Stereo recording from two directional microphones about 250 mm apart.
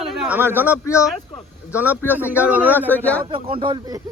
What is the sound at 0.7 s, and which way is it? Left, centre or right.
Speech, centre.